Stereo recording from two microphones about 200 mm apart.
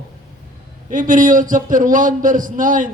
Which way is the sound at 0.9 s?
40° right (ahead or behind).